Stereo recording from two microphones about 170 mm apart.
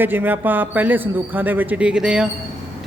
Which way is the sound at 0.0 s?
10° right (ahead or behind).